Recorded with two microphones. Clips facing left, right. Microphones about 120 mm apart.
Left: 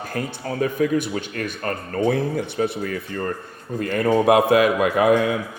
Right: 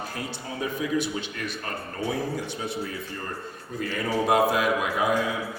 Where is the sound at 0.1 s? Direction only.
55° left (ahead or behind).